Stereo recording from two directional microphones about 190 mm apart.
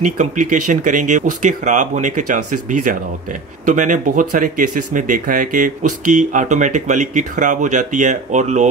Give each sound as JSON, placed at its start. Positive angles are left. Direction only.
{"t": 0.0, "sound": "speech", "side_deg": -40}